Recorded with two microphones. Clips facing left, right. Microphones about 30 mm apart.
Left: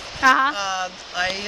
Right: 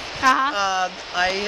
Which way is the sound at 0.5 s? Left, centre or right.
Centre.